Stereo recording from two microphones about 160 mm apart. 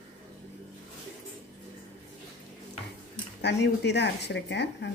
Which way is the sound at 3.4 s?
90° left.